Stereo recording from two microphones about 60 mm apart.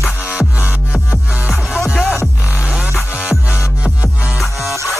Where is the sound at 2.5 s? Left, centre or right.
Centre.